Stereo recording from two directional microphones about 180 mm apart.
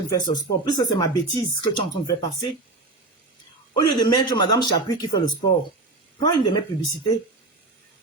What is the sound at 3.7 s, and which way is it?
Speech, 20° left (ahead or behind).